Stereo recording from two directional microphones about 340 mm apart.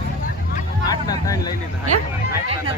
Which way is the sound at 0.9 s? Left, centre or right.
Centre.